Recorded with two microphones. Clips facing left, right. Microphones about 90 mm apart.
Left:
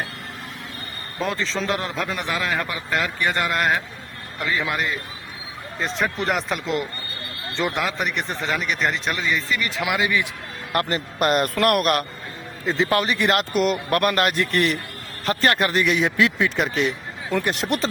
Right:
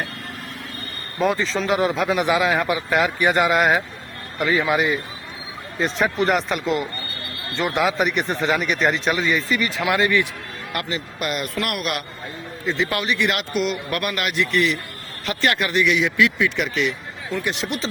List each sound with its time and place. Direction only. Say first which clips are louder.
1.2 s a man's voice: right 4 dB; 5° right (ahead or behind)
10.8 s a man's voice: left 6 dB; 45° left (ahead or behind)
17.4 s a man's voice: left 2 dB; 45° left (ahead or behind)